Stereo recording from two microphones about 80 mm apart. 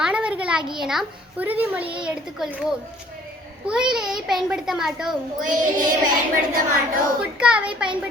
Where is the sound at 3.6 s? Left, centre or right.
Centre.